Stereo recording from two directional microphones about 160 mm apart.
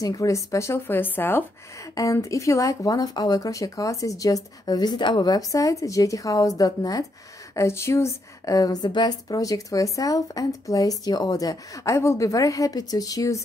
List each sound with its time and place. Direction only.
0.0 s a woman's voice: 20° left (ahead or behind)